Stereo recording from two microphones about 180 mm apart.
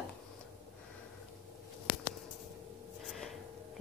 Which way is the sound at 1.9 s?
25° left (ahead or behind).